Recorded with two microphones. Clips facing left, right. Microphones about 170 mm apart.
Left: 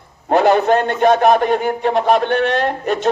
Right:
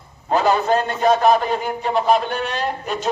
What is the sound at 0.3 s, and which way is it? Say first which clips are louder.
A man's voice: left 5 dB; 60° left (ahead or behind).